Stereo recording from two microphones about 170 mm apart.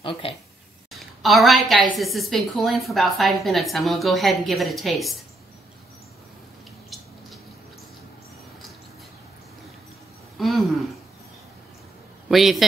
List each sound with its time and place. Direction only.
0.0 s speech: 30° left (ahead or behind)
1.2 s a woman's voice: centre (ahead or behind)
10.3 s a sound: centre (ahead or behind)
12.3 s a woman's voice: centre (ahead or behind)